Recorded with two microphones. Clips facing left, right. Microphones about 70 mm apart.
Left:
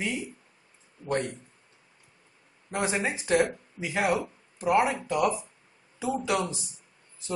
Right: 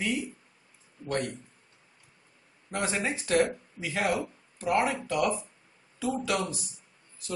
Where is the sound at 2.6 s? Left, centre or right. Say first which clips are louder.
Left 2 dB; centre.